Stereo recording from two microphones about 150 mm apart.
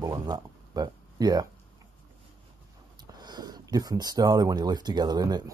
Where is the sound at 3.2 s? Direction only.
30° right (ahead or behind).